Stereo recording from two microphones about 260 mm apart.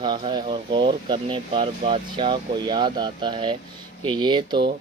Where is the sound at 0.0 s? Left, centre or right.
Centre.